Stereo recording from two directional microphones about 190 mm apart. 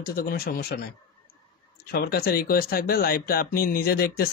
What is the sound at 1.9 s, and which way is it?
Speech, 55° left (ahead or behind).